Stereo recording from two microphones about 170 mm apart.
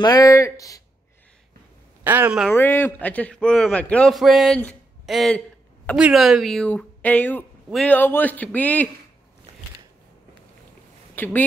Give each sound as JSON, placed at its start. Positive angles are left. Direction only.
{"t": 0.0, "sound": "speech", "side_deg": 20}
{"t": 2.0, "sound": "speech", "side_deg": -10}
{"t": 2.5, "sound": "speech", "side_deg": 10}
{"t": 11.1, "sound": "speech", "side_deg": 10}